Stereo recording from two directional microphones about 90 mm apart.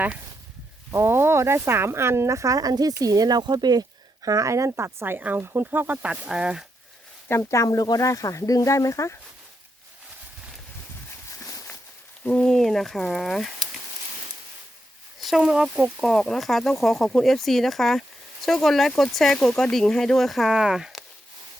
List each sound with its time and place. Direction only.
0.9 s speech: 30° right (ahead or behind); by 6.7 s 10° right (ahead or behind)
7.3 s speech: 30° left (ahead or behind)
11.3 s a sound: 35° left (ahead or behind)
12.2 s speech: 10° left (ahead or behind)
15.2 s speech: 5° right (ahead or behind)
16.0 s speech: 5° left (ahead or behind)